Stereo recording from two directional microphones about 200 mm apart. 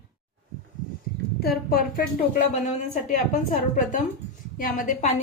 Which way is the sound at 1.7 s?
45° left (ahead or behind).